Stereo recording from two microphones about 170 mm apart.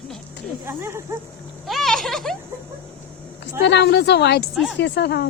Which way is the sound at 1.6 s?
Centre (ahead or behind).